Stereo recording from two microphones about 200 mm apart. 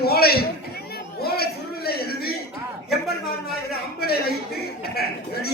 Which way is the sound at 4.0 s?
50° left (ahead or behind).